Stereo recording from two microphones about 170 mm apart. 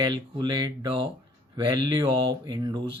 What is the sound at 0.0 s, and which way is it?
Speech, 25° right (ahead or behind).